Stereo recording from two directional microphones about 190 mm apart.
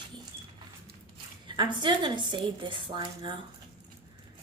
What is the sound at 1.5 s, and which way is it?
Speech, 25° right (ahead or behind).